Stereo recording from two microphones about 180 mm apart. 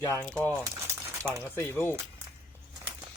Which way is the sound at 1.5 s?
15° left (ahead or behind).